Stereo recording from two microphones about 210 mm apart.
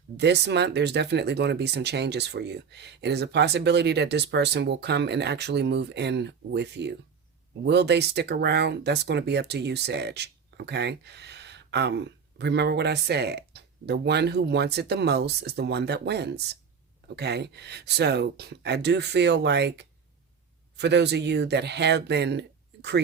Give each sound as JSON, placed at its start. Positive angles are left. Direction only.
{"t": 0.2, "sound": "speech", "side_deg": -55}